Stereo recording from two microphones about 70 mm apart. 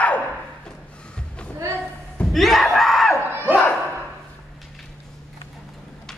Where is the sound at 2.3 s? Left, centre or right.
Centre.